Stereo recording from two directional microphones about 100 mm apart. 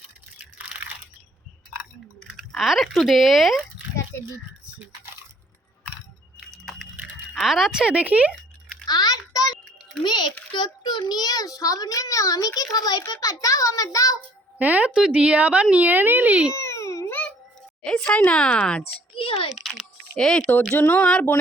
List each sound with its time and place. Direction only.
0.3 s crunch: 15° right (ahead or behind)
2.2 s speech: 5° right (ahead or behind)
7.3 s speech: centre (ahead or behind)
8.9 s a sound: 40° left (ahead or behind)
10.0 s a child's voice: 45° left (ahead or behind)
14.6 s speech: 15° right (ahead or behind)
16.6 s baby cry: 30° left (ahead or behind)
17.1 s a sound: 15° left (ahead or behind)
17.8 s speech: 10° left (ahead or behind)
19.1 s typing: 65° left (ahead or behind)
19.5 s a sound: centre (ahead or behind)
20.7 s speech: 15° left (ahead or behind)